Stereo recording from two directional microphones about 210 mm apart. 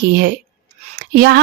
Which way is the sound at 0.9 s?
50° right (ahead or behind).